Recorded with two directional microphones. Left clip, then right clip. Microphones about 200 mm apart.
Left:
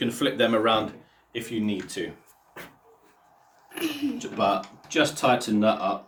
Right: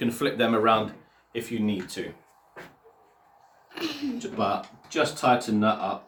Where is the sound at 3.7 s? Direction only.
5° right (ahead or behind).